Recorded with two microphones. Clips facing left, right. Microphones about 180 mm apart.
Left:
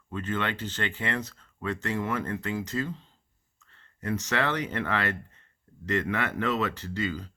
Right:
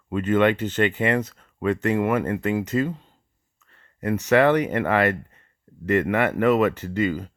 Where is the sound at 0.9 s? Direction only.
65° right (ahead or behind).